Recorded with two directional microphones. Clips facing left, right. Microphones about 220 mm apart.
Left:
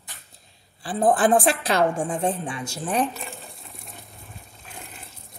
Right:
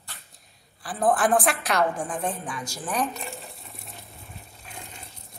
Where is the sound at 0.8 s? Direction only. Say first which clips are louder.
Left 3 dB; 25° left (ahead or behind).